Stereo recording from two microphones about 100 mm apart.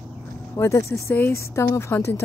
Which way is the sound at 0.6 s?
30° left (ahead or behind).